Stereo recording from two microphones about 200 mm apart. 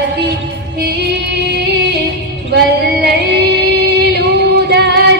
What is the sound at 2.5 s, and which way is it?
Female singing, 55° right (ahead or behind).